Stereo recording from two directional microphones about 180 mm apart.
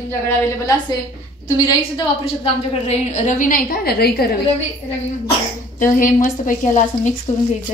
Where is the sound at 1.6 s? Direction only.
25° left (ahead or behind); by 4.4 s 60° left (ahead or behind).